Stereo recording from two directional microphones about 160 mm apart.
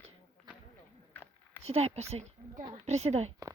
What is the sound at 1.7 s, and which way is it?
A woman's voice, 40° right (ahead or behind).